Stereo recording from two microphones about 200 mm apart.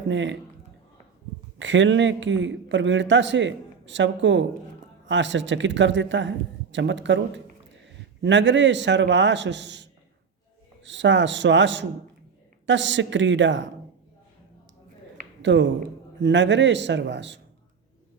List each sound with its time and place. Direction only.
0.1 s a man's voice: 65° right (ahead or behind)
1.5 s a man's voice: 70° right (ahead or behind)
8.2 s a man's voice: 65° right (ahead or behind)
15.4 s a man's voice: 65° right (ahead or behind)